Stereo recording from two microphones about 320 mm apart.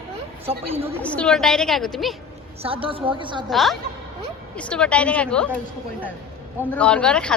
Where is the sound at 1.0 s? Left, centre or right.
Centre.